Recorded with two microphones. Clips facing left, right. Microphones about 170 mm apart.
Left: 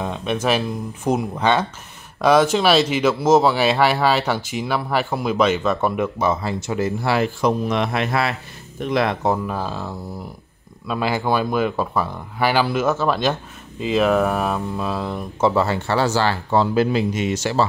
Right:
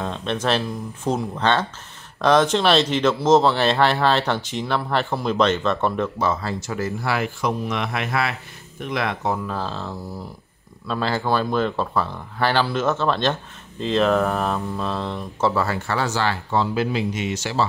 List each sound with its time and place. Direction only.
0.0 s speech: 10° left (ahead or behind); by 9.4 s 35° left (ahead or behind)
9.5 s speech: 10° left (ahead or behind)
15.5 s speech: 25° left (ahead or behind); by 17.6 s 45° left (ahead or behind)